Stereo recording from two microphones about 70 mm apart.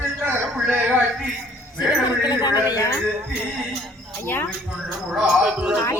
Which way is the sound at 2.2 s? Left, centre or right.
Left.